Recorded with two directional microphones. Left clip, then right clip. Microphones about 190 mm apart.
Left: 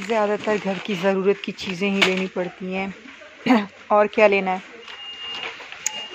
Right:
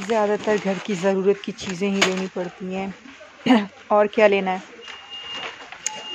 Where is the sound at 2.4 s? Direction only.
15° left (ahead or behind).